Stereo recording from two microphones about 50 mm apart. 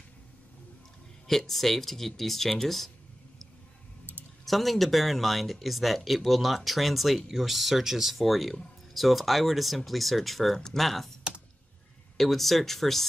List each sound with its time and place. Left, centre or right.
1.2 s speech: centre
4.5 s speech: centre
12.2 s speech: centre